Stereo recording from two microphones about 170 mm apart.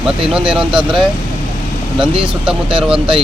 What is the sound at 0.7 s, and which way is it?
Speech, 30° right (ahead or behind).